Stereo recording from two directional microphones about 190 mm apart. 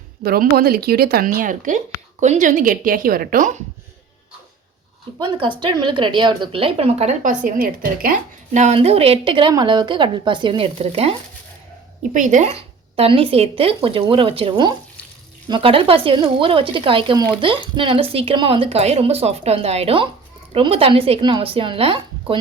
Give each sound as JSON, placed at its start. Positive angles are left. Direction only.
{"t": 0.2, "sound": "speech", "side_deg": -55}
{"t": 5.1, "sound": "a woman's voice", "side_deg": -30}
{"t": 8.5, "sound": "a woman's voice", "side_deg": -35}